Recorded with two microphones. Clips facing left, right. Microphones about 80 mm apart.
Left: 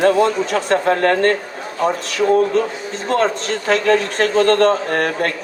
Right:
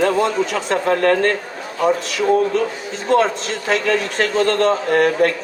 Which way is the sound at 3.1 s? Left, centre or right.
Left.